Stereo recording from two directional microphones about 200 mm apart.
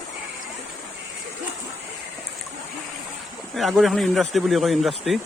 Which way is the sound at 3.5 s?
Centre (ahead or behind).